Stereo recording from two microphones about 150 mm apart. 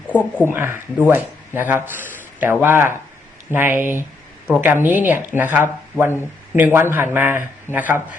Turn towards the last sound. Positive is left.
turn(degrees=-15)  # may be behind; listen again after turning